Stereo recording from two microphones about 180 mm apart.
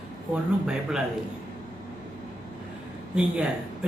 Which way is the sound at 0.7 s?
5° right (ahead or behind).